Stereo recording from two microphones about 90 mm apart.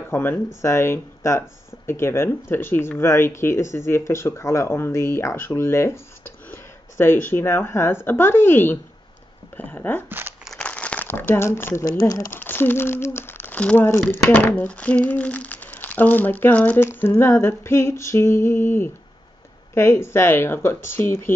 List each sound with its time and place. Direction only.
0.1 s speech: 25° left (ahead or behind)
10.0 s speech: 25° right (ahead or behind)
10.6 s crumpling: 15° left (ahead or behind)
11.1 s speech: 25° left (ahead or behind)